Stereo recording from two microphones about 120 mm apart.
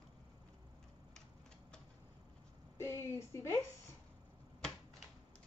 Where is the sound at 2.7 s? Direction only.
20° left (ahead or behind).